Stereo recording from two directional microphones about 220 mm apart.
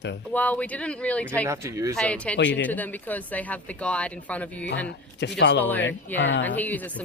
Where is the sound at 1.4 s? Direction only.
15° right (ahead or behind).